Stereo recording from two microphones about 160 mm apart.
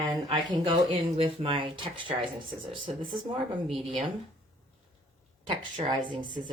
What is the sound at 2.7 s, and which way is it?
Speech, centre (ahead or behind).